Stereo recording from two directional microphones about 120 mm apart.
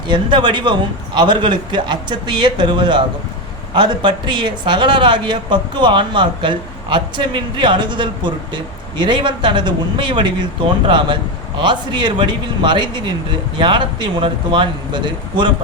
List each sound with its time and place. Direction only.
0.1 s speech: 40° right (ahead or behind)